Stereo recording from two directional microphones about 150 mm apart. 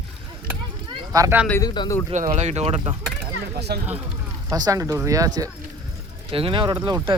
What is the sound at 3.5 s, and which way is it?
Speech, 90° right.